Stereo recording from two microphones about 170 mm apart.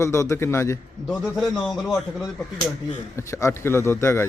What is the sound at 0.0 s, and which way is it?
Speech, 15° left (ahead or behind).